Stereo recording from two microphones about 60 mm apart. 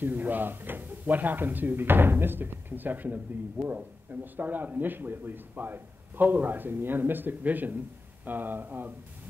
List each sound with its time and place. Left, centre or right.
0.0 s a man's voice: right